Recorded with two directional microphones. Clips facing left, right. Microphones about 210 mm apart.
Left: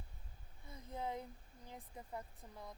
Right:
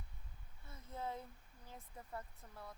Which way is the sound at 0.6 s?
15° left (ahead or behind).